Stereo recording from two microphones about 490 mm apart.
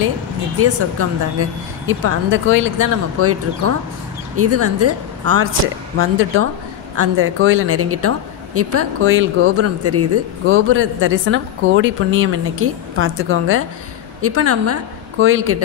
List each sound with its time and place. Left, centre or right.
0.6 s a woman's voice: right